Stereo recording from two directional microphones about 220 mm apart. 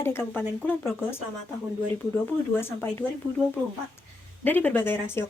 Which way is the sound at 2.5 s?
10° left (ahead or behind).